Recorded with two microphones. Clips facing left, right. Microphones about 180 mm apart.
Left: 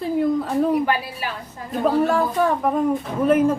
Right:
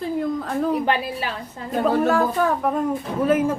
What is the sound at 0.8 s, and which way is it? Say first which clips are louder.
Speech: right 1 dB; 25° right (ahead or behind).